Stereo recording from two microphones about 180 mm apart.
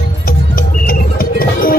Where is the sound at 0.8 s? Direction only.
55° left (ahead or behind).